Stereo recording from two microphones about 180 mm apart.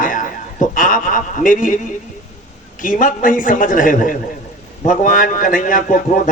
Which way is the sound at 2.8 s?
45° left (ahead or behind).